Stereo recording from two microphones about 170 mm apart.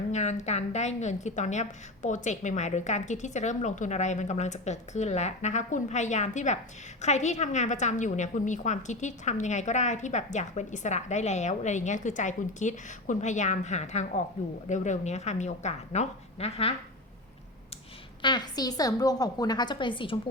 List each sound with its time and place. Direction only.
0.1 s a woman's voice: 40° left (ahead or behind)
18.2 s a woman's voice: 25° left (ahead or behind)